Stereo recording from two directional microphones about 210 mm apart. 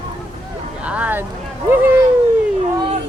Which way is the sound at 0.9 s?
5° right (ahead or behind).